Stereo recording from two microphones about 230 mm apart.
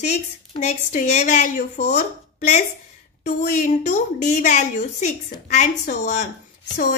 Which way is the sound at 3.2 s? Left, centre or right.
Left.